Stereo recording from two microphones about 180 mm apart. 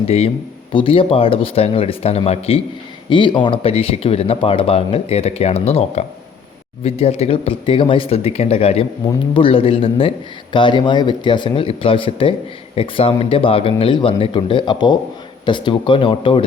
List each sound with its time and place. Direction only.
0.7 s speech: 30° left (ahead or behind)